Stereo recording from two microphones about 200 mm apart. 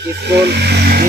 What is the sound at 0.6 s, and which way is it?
Vehicle, 50° right (ahead or behind).